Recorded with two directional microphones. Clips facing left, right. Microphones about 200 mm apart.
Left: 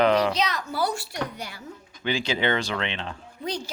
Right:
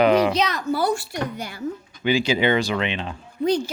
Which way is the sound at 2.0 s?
10° right (ahead or behind).